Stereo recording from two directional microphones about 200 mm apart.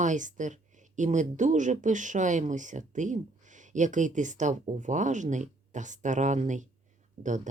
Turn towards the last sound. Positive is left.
turn(degrees=-40)  # may be behind; listen again after turning